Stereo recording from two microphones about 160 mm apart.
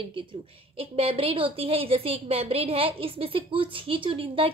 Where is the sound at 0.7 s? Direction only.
35° right (ahead or behind).